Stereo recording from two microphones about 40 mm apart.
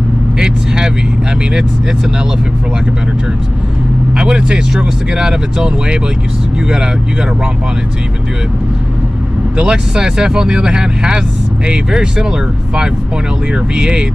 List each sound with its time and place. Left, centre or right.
0.4 s speech: centre
4.1 s speech: right
9.6 s speech: right